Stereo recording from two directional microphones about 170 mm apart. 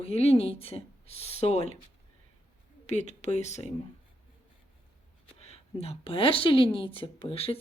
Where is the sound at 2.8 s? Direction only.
40° left (ahead or behind).